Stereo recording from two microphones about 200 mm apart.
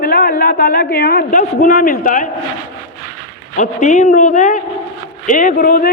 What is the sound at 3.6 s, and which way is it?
A man's voice, 40° left (ahead or behind).